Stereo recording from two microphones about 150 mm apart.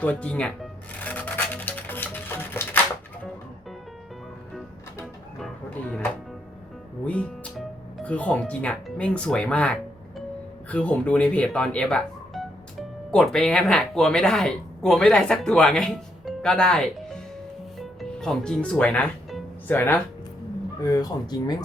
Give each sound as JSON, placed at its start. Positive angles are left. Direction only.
{"t": 0.0, "sound": "music", "side_deg": 10}
{"t": 7.0, "sound": "speech", "side_deg": 10}
{"t": 17.7, "sound": "music", "side_deg": 5}
{"t": 20.8, "sound": "speech", "side_deg": 25}